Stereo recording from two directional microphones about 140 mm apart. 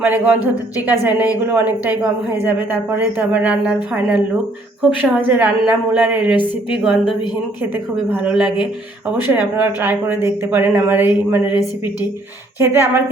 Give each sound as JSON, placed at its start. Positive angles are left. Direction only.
{"t": 0.0, "sound": "a woman's voice", "side_deg": -10}
{"t": 5.3, "sound": "a woman's voice", "side_deg": -10}
{"t": 6.8, "sound": "a woman's voice", "side_deg": 0}